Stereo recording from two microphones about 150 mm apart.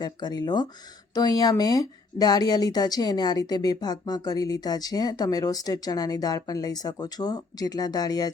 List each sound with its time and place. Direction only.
0.0 s speech: 30° left (ahead or behind)